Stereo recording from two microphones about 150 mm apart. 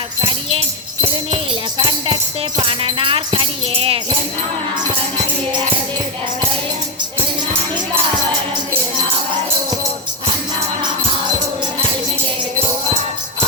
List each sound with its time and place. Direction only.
0.2 s jingle bell: 35° right (ahead or behind)
1.8 s music: 30° right (ahead or behind)
2.6 s speech: 35° right (ahead or behind)